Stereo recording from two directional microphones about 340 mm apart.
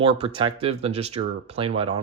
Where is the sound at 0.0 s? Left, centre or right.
Centre.